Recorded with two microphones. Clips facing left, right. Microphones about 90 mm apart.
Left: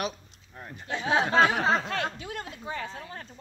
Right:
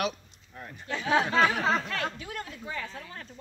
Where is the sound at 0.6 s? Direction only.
20° left (ahead or behind).